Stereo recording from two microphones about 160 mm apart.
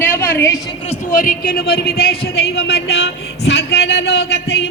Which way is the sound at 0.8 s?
55° left (ahead or behind).